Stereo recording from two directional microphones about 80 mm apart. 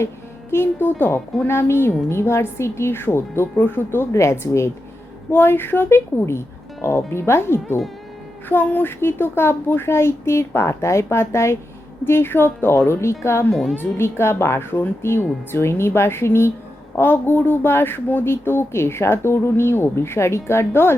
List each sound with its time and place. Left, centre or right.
0.5 s speech: left
4.1 s speech: left
13.5 s a woman's voice: centre
13.7 s speech: left